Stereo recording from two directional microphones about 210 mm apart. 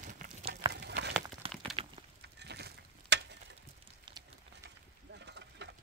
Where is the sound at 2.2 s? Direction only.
55° right (ahead or behind).